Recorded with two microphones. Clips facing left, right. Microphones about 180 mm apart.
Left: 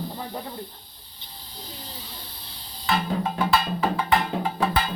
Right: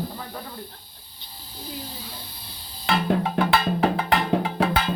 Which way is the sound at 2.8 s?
65° right (ahead or behind).